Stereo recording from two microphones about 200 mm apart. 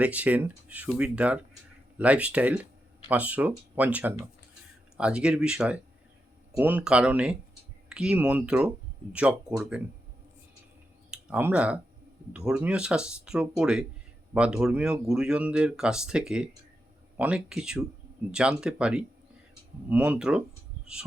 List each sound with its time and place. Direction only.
0.0 s speech: 5° right (ahead or behind)
11.1 s speech: 10° right (ahead or behind)